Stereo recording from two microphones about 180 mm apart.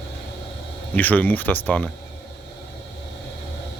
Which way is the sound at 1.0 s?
10° left (ahead or behind).